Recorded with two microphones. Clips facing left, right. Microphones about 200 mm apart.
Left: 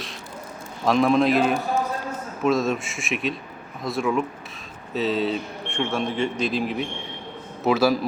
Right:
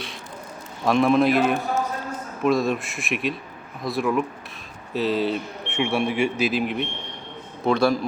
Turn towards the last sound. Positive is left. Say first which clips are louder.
# even
turn(degrees=5)  # may be behind; listen again after turning